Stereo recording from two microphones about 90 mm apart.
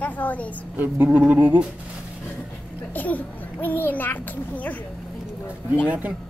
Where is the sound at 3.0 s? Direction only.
20° left (ahead or behind).